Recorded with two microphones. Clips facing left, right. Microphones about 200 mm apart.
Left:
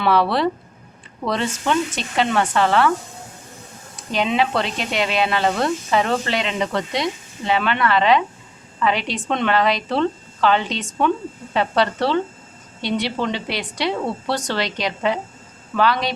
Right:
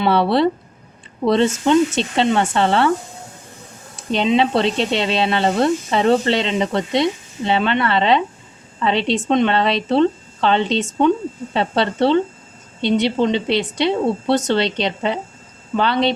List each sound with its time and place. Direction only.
0.0 s speech: 25° right (ahead or behind)
4.1 s speech: 25° right (ahead or behind)